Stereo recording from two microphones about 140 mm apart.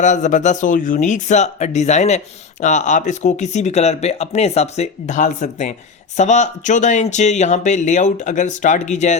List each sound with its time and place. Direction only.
0.0 s speech: 60° left (ahead or behind)